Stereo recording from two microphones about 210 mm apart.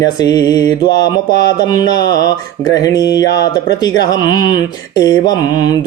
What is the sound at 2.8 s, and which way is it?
Mantra, 15° left (ahead or behind).